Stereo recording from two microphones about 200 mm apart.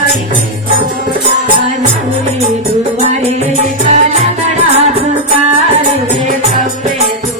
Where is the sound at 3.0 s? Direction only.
35° right (ahead or behind).